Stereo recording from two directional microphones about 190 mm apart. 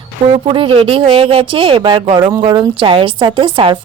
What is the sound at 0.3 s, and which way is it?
A woman's voice, 30° right (ahead or behind).